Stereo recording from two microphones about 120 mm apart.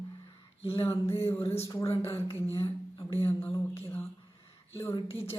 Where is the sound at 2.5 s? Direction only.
25° left (ahead or behind).